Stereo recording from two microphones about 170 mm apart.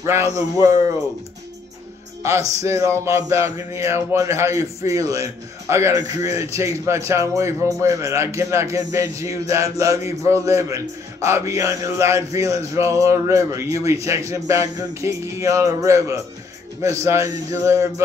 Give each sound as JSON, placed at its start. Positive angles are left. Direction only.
{"t": 0.0, "sound": "a man's voice", "side_deg": -15}
{"t": 2.6, "sound": "a man's voice", "side_deg": -15}